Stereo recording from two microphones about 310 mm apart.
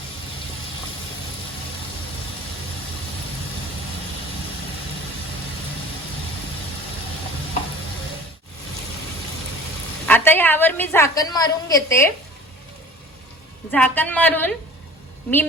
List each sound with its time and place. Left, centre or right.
10.1 s a woman's voice: centre
13.7 s a woman's voice: centre